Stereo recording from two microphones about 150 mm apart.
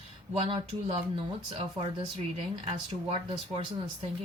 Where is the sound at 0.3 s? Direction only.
35° right (ahead or behind).